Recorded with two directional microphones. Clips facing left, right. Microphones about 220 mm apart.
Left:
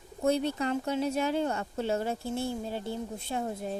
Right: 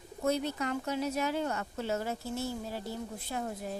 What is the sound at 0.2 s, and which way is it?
Speech, 30° left (ahead or behind).